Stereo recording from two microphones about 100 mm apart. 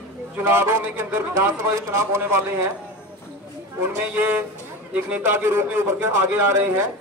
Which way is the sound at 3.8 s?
20° right (ahead or behind).